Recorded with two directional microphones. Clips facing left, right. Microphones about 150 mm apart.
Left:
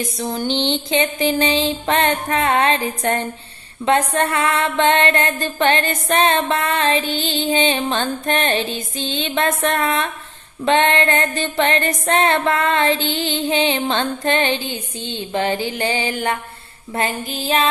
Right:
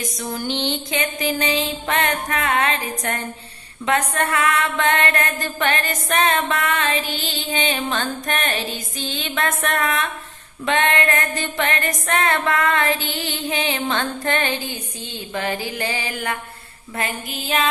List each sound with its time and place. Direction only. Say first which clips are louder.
0.2 s music: left 4 dB; 30° left (ahead or behind)